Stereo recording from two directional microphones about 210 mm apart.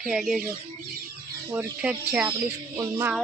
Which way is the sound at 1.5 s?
10° right (ahead or behind).